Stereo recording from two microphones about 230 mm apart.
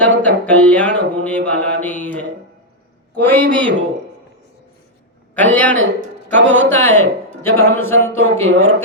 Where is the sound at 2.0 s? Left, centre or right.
Centre.